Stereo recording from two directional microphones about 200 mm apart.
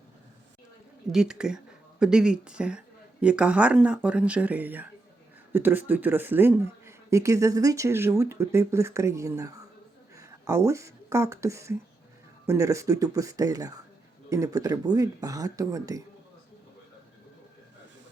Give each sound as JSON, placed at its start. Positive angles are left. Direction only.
{"t": 1.1, "sound": "speech", "side_deg": -5}